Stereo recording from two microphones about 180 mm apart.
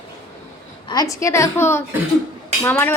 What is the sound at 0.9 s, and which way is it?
A woman's voice, 20° left (ahead or behind).